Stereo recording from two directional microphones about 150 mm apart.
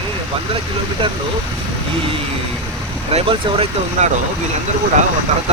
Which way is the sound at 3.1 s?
40° right (ahead or behind).